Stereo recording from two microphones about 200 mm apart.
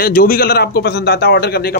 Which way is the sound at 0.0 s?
45° left (ahead or behind).